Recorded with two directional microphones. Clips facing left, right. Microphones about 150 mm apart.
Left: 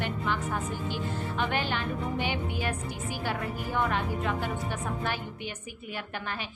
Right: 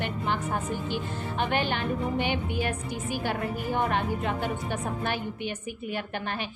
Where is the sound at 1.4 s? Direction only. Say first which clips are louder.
Right 3 dB; 60° right (ahead or behind).